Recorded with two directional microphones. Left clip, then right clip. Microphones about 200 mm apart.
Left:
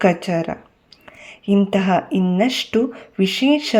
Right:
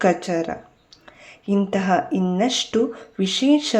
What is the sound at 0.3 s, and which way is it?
Speech, 35° left (ahead or behind).